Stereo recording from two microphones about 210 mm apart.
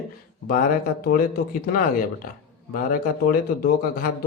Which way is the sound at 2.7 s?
40° left (ahead or behind).